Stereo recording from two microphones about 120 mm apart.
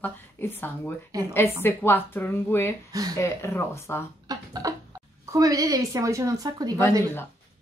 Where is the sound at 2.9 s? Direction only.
30° right (ahead or behind).